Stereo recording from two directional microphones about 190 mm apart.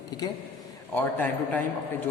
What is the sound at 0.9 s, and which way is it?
Speech, 10° left (ahead or behind).